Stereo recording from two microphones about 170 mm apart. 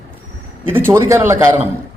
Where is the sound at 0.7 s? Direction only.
15° right (ahead or behind).